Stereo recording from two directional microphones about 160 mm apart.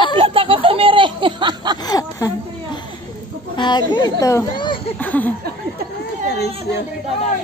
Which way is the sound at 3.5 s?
30° left (ahead or behind).